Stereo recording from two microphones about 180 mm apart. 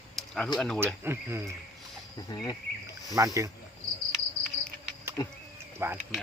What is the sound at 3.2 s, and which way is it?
Speech, 20° right (ahead or behind).